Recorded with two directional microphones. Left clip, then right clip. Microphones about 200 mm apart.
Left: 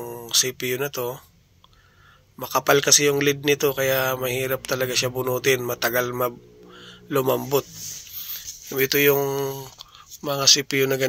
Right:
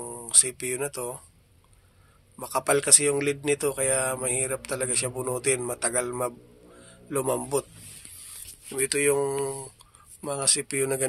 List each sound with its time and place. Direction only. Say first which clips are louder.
0.0 s speech: left 5 dB; 10° left (ahead or behind)
2.3 s speech: left 6 dB; 15° left (ahead or behind)
8.6 s speech: left 6 dB; 25° left (ahead or behind)